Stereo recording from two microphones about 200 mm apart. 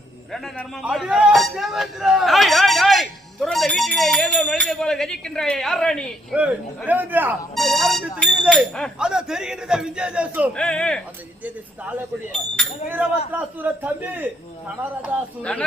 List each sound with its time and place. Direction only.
0.3 s a man's voice: centre (ahead or behind)
6.3 s a man's voice: 5° right (ahead or behind)
10.5 s a man's voice: 5° left (ahead or behind)
11.4 s speech: 10° right (ahead or behind)